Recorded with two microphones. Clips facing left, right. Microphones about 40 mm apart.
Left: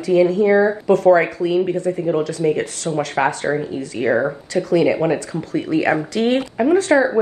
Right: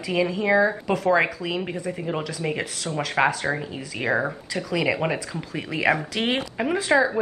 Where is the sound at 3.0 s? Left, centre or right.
Centre.